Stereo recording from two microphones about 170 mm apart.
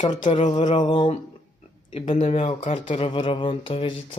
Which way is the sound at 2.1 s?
40° left (ahead or behind).